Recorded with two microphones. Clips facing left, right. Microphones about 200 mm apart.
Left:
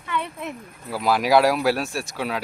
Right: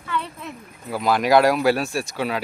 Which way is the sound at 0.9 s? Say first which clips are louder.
Right 1 dB; 5° left (ahead or behind).